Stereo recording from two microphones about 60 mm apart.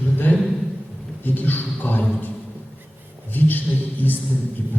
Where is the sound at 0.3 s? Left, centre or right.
Left.